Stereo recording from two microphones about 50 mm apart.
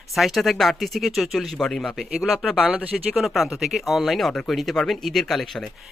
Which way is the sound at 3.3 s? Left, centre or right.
Centre.